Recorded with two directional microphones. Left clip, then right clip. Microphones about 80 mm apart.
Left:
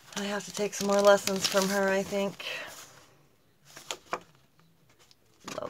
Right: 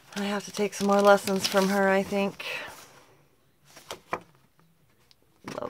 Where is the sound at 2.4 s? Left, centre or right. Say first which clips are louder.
Right 2 dB; right.